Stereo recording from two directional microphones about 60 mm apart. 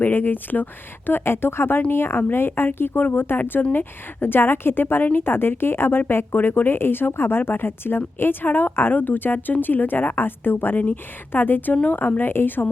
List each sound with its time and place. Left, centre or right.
0.0 s a woman's voice: left